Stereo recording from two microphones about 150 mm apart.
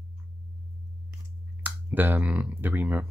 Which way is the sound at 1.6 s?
10° right (ahead or behind).